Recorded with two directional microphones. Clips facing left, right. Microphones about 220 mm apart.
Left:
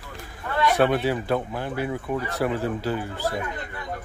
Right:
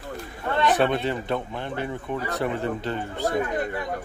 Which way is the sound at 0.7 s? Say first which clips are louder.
Left 2 dB; 5° left (ahead or behind).